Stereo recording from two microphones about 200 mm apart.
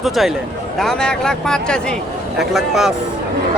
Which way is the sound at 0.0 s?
Centre (ahead or behind).